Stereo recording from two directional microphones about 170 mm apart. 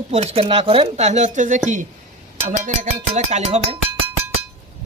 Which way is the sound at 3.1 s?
45° right (ahead or behind).